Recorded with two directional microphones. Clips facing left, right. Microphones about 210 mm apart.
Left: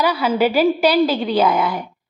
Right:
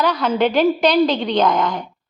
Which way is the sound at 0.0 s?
10° left (ahead or behind).